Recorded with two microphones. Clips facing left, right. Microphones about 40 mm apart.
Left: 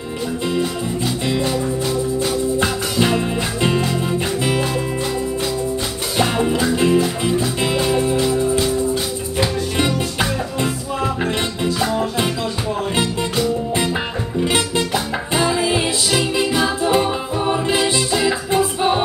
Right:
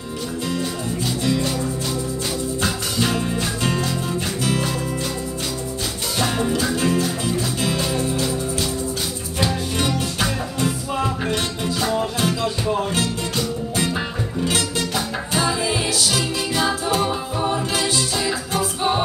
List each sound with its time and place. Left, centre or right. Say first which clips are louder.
1.2 s music: left 1 dB; left
2.6 s music: left 4 dB; left
6.1 s music: left 4 dB; left
14.4 s music: left 4 dB; left